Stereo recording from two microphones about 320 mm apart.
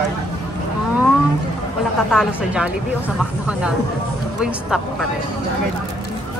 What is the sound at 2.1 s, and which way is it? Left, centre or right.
Speech, centre.